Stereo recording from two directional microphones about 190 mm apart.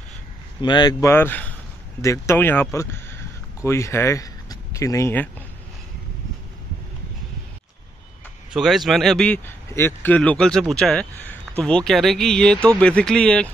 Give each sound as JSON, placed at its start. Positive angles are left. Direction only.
{"t": 0.6, "sound": "speech", "side_deg": 25}
{"t": 8.5, "sound": "speech", "side_deg": 0}